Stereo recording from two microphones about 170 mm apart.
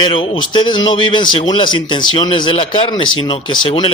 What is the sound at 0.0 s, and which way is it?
A man's voice, 30° left (ahead or behind).